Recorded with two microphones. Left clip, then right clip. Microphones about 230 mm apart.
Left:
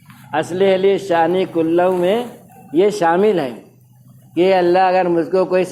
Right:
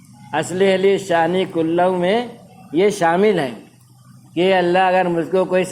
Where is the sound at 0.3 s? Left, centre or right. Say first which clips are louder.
Left 1 dB; right.